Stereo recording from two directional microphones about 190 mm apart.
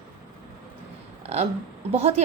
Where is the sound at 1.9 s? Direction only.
35° right (ahead or behind).